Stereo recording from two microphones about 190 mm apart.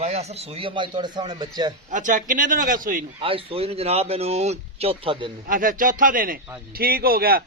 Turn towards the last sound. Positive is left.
turn(degrees=-50)  # may be behind; listen again after turning